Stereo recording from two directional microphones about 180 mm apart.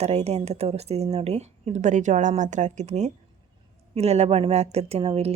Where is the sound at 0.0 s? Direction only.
35° right (ahead or behind).